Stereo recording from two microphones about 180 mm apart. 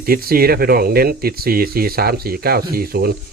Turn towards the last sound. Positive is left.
turn(degrees=-60)  # may be behind; listen again after turning